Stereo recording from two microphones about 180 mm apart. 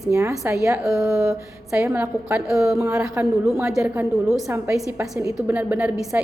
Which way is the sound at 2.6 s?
15° right (ahead or behind).